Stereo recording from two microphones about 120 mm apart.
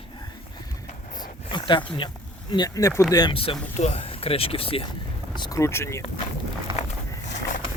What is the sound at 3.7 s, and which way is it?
Speech, 60° left (ahead or behind).